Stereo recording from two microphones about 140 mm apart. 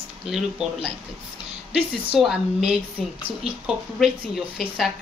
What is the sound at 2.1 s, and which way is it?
Speech, 5° right (ahead or behind).